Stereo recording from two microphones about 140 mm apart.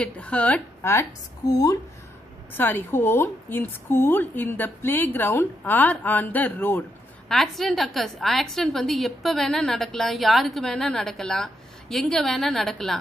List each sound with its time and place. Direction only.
0.0 s a woman's voice: 10° left (ahead or behind)
1.5 s speech: 25° left (ahead or behind)
2.5 s a woman's voice: 15° left (ahead or behind)
7.2 s a woman's voice: centre (ahead or behind)